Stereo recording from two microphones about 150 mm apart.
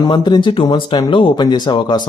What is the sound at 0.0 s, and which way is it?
Speech, 30° left (ahead or behind).